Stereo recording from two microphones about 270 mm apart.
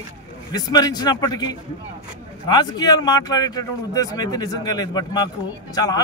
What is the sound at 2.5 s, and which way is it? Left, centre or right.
A man's voice, centre.